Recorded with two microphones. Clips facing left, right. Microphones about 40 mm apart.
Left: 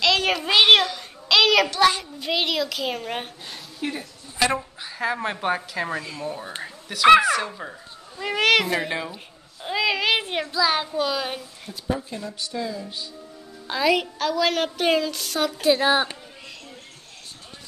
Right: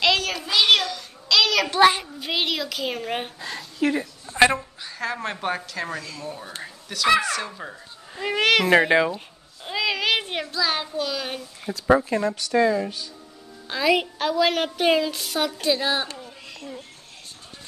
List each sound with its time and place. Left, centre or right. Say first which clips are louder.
0.2 s child singing: left 5 dB; left
0.5 s a sound: left 3 dB; left
1.7 s a child's voice: right 3 dB; centre
2.1 s a woman's voice: left 2 dB; centre
3.4 s a sound: right 7 dB; right
4.6 s a woman's voice: left 2 dB; centre
8.2 s speech: even; centre
8.6 s speech: right 8 dB; right
9.6 s speech: left 2 dB; centre
11.7 s speech: right 9 dB; right
13.7 s a woman's voice: even; centre
13.9 s a woman's voice: right 1 dB; centre
15.7 s a woman's voice: left 6 dB; centre